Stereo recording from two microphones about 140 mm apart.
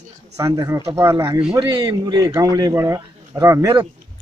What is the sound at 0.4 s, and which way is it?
Speech, 20° right (ahead or behind).